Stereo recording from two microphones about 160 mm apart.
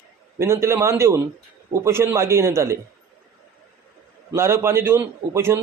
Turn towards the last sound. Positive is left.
turn(degrees=-15)  # may be behind; listen again after turning